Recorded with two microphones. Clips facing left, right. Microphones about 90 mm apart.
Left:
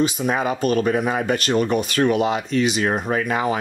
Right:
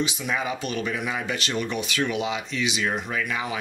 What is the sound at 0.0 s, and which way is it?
Speech, 45° left (ahead or behind).